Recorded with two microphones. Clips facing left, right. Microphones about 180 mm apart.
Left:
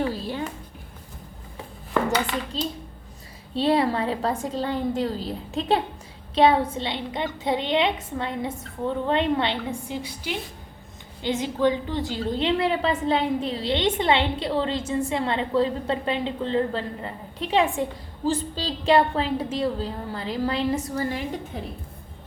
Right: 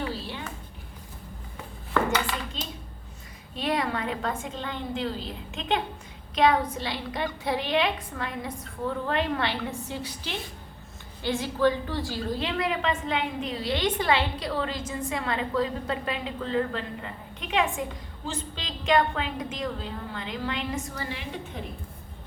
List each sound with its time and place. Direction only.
0.0 s music: 40° left (ahead or behind)
2.0 s a woman's voice: 35° left (ahead or behind)
11.2 s a woman's voice: 20° left (ahead or behind); by 21.6 s 45° left (ahead or behind)